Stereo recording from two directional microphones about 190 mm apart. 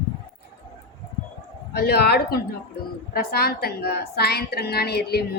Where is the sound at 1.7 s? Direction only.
55° left (ahead or behind).